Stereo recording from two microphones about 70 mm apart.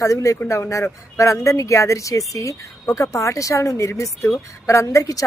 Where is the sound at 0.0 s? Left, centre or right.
Left.